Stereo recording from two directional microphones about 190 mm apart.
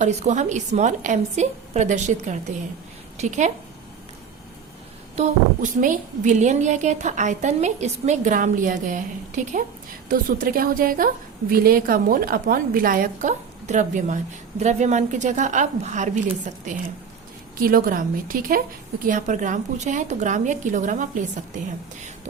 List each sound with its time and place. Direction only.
0.0 s a woman's voice: 40° right (ahead or behind)
5.1 s a woman's voice: 40° right (ahead or behind)
17.6 s a woman's voice: 50° right (ahead or behind)